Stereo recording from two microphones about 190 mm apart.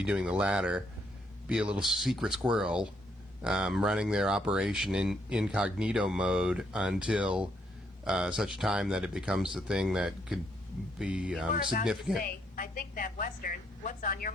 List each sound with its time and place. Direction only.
0.0 s speech: 5° right (ahead or behind)
11.5 s a woman's voice: 45° left (ahead or behind)
11.9 s speech: centre (ahead or behind)
12.2 s a woman's voice: 45° left (ahead or behind)